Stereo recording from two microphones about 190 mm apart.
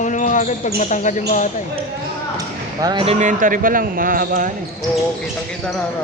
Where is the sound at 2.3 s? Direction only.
20° right (ahead or behind); by 4.5 s 50° right (ahead or behind).